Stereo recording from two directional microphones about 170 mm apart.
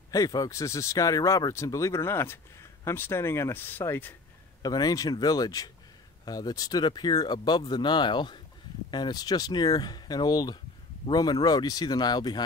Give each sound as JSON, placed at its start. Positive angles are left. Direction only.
{"t": 0.1, "sound": "speech", "side_deg": 20}